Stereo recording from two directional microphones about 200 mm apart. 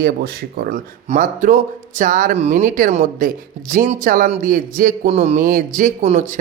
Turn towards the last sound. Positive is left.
turn(degrees=-40)  # may be behind; listen again after turning